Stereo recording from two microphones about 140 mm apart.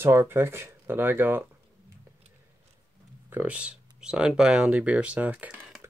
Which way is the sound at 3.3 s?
10° right (ahead or behind).